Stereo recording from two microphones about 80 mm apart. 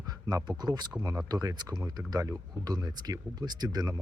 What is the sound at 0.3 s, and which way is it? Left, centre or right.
Speech, right.